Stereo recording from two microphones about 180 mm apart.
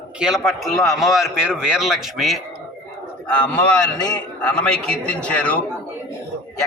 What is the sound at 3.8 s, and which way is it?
Speech, 20° left (ahead or behind).